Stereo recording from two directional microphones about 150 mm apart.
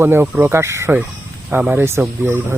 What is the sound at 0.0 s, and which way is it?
Speech, 15° right (ahead or behind).